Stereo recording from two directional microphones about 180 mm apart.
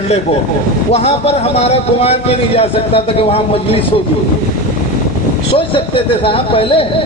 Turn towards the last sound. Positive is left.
turn(degrees=30)  # may be behind; listen again after turning